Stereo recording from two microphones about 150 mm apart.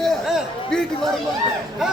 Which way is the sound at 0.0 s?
Centre (ahead or behind).